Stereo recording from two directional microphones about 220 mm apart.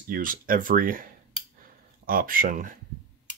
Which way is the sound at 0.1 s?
40° right (ahead or behind).